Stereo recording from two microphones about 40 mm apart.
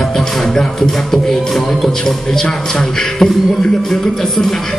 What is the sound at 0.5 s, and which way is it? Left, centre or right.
Music, centre.